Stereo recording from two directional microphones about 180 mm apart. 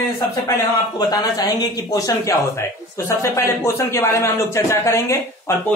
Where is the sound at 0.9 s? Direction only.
20° left (ahead or behind).